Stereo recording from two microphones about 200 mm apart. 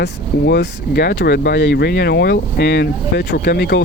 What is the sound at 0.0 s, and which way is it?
Speech, 55° left (ahead or behind).